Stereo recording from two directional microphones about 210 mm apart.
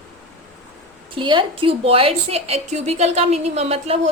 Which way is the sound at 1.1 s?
25° right (ahead or behind).